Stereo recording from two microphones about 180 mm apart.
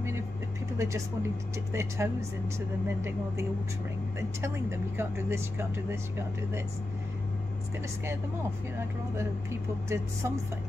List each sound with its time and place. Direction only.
0.7 s speech: 15° right (ahead or behind)
4.2 s speech: 15° right (ahead or behind)
8.7 s speech: 15° right (ahead or behind)